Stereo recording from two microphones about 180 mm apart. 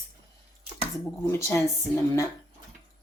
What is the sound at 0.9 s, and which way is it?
Speech, 15° left (ahead or behind).